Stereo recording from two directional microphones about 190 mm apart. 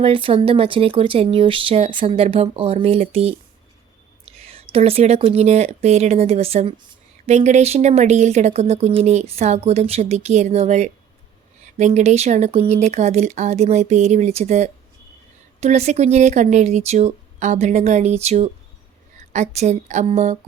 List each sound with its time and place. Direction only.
0.0 s speech: 25° right (ahead or behind)